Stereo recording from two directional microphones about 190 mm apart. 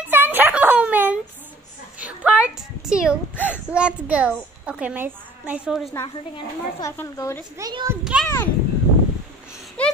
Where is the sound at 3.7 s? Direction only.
5° right (ahead or behind).